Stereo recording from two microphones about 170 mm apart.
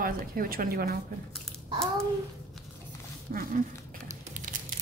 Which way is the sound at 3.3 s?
60° right (ahead or behind).